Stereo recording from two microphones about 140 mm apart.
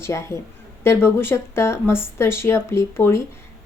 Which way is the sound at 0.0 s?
20° left (ahead or behind).